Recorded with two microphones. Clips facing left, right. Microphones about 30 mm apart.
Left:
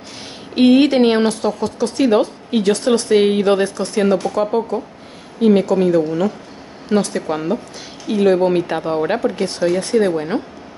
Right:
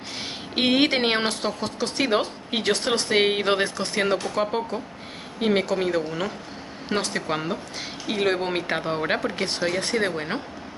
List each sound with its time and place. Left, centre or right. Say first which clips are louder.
0.6 s speech: left 9 dB; centre